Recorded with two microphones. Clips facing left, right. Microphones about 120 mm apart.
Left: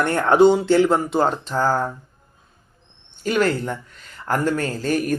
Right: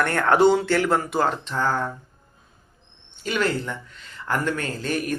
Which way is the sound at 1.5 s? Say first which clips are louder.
Left 4 dB; 35° left (ahead or behind).